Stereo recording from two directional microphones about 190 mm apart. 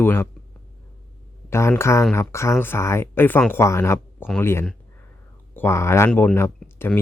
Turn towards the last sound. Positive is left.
turn(degrees=10)  # may be behind; listen again after turning